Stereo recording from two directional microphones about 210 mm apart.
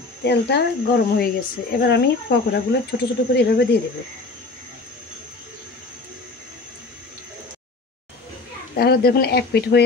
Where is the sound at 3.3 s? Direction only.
50° left (ahead or behind).